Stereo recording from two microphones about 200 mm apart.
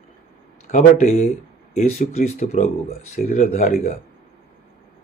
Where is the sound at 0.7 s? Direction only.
35° left (ahead or behind).